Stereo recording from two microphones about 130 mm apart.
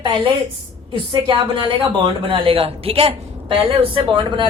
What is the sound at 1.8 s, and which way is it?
A woman's voice, 40° right (ahead or behind).